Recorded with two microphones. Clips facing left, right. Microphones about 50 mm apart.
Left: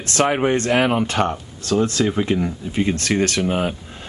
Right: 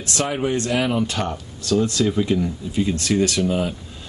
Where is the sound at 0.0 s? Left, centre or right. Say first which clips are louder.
Left 5 dB; left.